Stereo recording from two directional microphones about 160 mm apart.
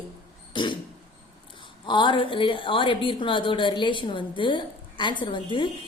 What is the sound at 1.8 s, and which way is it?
A woman's voice, 30° left (ahead or behind).